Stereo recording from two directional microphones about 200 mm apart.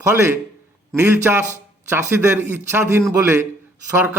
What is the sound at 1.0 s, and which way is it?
A man's voice, 10° right (ahead or behind).